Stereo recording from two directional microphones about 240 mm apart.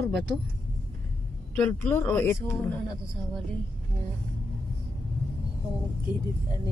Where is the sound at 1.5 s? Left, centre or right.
Centre.